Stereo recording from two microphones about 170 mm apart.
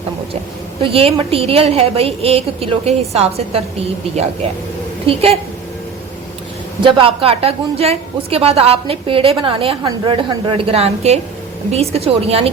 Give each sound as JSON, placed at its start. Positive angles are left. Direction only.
{"t": 0.8, "sound": "a woman's voice", "side_deg": -35}
{"t": 5.0, "sound": "a woman's voice", "side_deg": -35}
{"t": 6.8, "sound": "a woman's voice", "side_deg": -30}